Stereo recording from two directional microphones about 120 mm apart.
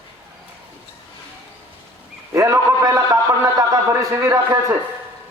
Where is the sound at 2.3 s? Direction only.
25° right (ahead or behind).